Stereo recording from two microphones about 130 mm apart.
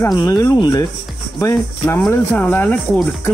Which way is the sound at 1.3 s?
20° left (ahead or behind).